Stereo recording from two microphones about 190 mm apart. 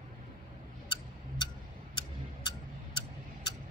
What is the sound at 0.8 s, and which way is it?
Tick-tock, 25° left (ahead or behind).